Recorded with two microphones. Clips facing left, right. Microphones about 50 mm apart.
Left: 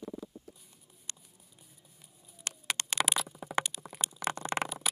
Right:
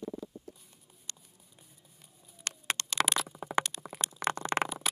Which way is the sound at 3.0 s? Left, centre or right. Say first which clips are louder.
Right 2 dB; centre.